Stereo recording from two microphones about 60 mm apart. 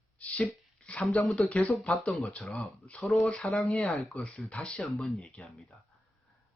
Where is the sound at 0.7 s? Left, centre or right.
Centre.